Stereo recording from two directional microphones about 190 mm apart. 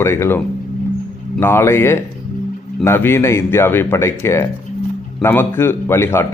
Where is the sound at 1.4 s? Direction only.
10° left (ahead or behind).